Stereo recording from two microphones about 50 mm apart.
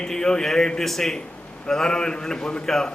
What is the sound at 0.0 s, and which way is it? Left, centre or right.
A man's voice, centre.